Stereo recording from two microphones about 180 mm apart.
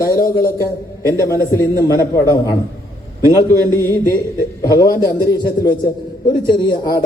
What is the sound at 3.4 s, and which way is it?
A man's voice, 15° left (ahead or behind).